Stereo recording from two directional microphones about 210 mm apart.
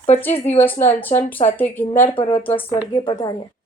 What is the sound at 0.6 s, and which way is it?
Speech, 10° left (ahead or behind).